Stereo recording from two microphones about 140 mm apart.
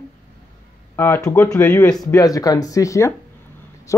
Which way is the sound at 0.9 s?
15° left (ahead or behind).